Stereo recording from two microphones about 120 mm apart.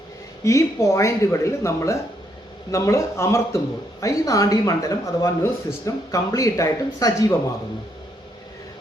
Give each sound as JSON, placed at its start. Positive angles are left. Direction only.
{"t": 0.4, "sound": "speech", "side_deg": 25}